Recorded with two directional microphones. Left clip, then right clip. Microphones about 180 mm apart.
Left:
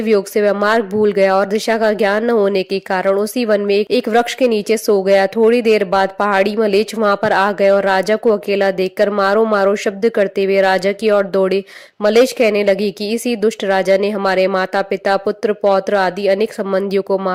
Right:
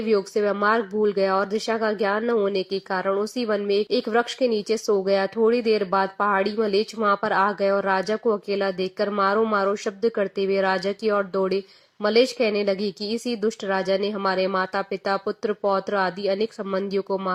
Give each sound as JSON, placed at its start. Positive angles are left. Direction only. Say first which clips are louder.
{"t": 0.1, "sound": "speech", "louder": "left 8 dB", "side_deg": 30}